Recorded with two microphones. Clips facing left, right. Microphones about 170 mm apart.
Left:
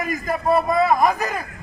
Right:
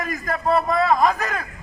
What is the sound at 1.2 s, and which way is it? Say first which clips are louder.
Speech: left 1 dB; centre (ahead or behind).